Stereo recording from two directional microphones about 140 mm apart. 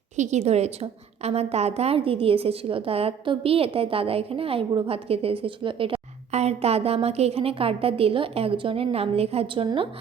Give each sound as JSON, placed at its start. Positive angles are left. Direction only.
{"t": 0.2, "sound": "a woman's voice", "side_deg": -55}
{"t": 6.3, "sound": "a woman's voice", "side_deg": -50}